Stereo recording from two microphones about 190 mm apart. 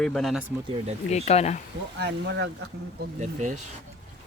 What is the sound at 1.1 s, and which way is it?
Speech, 35° left (ahead or behind).